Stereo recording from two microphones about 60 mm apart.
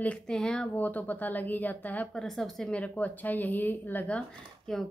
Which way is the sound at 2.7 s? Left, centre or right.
Left.